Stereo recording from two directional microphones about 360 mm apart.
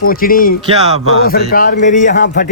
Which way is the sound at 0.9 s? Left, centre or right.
Left.